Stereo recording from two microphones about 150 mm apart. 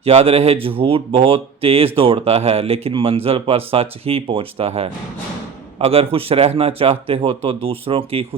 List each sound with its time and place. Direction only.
0.0 s speech: 45° right (ahead or behind)